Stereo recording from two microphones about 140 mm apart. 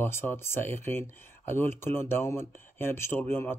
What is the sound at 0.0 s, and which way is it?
Speech, 15° left (ahead or behind).